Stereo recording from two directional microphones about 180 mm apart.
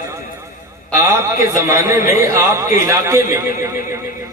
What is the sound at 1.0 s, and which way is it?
A man's voice, 15° right (ahead or behind).